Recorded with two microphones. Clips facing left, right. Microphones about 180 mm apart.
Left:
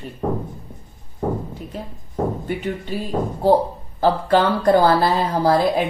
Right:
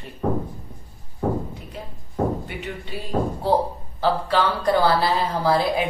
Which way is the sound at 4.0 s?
50° left (ahead or behind).